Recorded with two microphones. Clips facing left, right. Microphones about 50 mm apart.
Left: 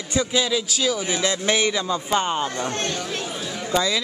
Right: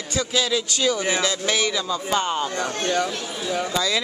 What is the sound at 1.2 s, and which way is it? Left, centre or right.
Speech, left.